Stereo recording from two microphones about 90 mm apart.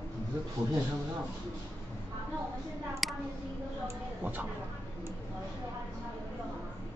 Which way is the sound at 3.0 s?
Centre (ahead or behind).